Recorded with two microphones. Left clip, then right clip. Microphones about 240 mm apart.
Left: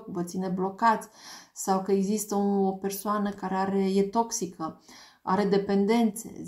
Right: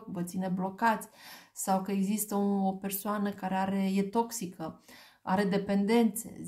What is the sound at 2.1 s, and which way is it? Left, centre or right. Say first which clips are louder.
Speech: left 5 dB; right.